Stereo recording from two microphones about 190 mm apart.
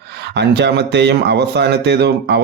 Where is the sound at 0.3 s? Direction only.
65° right (ahead or behind).